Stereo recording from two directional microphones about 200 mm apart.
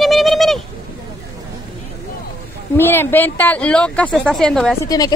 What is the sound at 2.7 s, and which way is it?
Speech, 10° left (ahead or behind).